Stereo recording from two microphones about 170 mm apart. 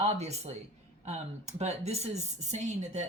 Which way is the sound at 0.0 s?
40° right (ahead or behind).